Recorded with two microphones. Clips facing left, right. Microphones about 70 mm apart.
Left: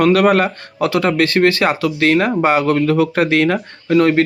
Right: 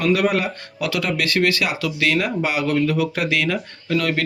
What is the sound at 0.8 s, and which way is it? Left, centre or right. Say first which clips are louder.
Speech: left 8 dB; left.